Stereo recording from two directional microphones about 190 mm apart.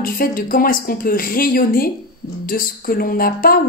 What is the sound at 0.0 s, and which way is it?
Speech, 50° left (ahead or behind).